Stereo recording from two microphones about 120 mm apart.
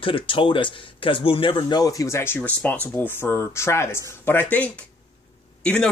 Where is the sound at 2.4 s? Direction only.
10° left (ahead or behind).